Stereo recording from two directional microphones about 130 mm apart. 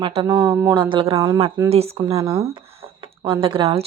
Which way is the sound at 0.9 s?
45° right (ahead or behind).